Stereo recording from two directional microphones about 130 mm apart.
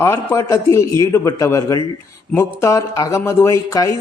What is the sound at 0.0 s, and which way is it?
Speech, 20° left (ahead or behind).